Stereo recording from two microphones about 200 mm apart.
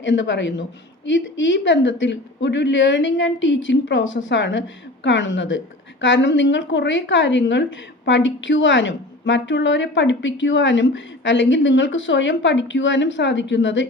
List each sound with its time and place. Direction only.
0.0 s a woman's voice: 65° left (ahead or behind)